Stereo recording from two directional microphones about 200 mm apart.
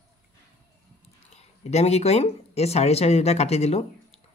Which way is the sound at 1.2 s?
35° left (ahead or behind).